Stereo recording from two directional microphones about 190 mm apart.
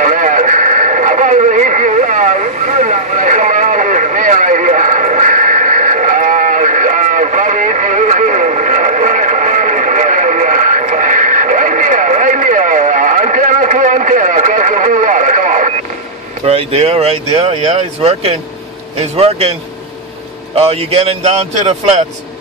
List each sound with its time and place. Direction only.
0.0 s radio: 45° right (ahead or behind)
16.4 s speech: 30° right (ahead or behind)
20.5 s speech: 35° right (ahead or behind)